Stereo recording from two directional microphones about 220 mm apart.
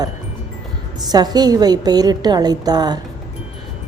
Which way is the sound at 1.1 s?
20° right (ahead or behind).